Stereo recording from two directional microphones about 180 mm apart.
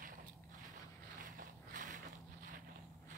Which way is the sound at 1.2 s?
50° right (ahead or behind).